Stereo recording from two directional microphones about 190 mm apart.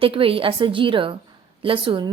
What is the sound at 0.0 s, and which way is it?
A woman's voice, 30° right (ahead or behind).